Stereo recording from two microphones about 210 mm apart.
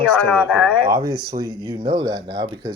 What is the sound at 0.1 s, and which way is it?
Speech, centre (ahead or behind).